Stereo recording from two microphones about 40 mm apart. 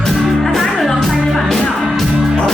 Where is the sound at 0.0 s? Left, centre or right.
Centre.